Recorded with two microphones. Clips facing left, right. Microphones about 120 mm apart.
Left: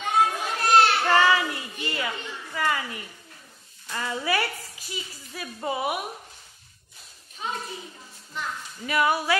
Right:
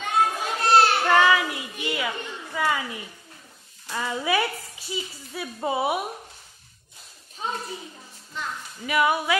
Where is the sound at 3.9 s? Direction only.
10° right (ahead or behind).